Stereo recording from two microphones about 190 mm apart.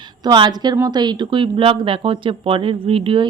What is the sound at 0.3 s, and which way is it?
Speech, 20° right (ahead or behind).